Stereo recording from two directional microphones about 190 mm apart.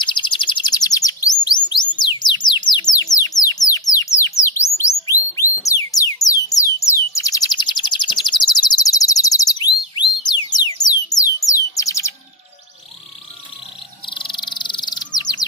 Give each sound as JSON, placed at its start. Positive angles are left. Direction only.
{"t": 0.0, "sound": "chirp", "side_deg": 25}
{"t": 1.7, "sound": "bird", "side_deg": 25}
{"t": 5.6, "sound": "music", "side_deg": 15}
{"t": 11.1, "sound": "bird", "side_deg": 15}
{"t": 14.0, "sound": "bird", "side_deg": 25}
{"t": 15.1, "sound": "chirp", "side_deg": 20}